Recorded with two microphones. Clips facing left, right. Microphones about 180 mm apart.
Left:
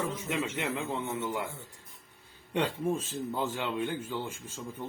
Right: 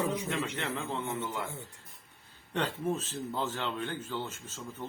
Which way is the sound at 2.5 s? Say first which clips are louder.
Left 2 dB; 10° left (ahead or behind).